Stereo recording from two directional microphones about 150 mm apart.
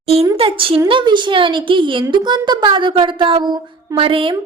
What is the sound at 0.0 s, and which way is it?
A woman's voice, 40° right (ahead or behind).